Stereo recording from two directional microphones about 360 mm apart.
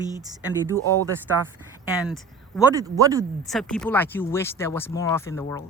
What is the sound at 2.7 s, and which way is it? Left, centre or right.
Speech, centre.